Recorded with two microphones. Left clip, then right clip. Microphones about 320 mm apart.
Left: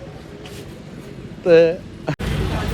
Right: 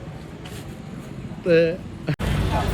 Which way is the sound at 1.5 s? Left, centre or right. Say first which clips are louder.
Left 6 dB; centre.